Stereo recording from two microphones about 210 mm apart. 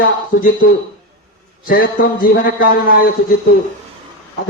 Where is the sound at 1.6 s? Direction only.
45° left (ahead or behind).